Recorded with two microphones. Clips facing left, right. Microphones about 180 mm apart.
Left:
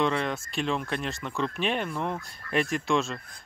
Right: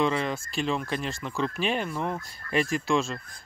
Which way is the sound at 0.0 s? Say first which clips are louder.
Right 1 dB; centre (ahead or behind).